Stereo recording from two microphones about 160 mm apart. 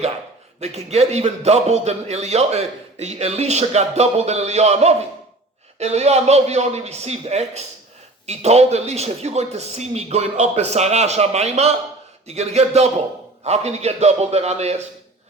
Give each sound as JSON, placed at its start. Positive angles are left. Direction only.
{"t": 0.6, "sound": "a man's voice", "side_deg": -40}